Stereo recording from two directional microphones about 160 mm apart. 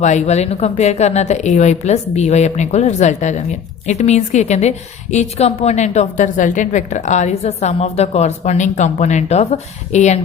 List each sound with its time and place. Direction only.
0.0 s a woman's voice: 45° left (ahead or behind)